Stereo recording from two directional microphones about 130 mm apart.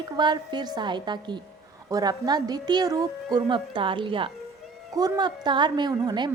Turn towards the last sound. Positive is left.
turn(degrees=-30)  # may be behind; listen again after turning